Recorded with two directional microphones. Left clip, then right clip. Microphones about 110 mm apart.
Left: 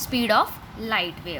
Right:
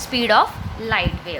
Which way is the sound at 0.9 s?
55° left (ahead or behind).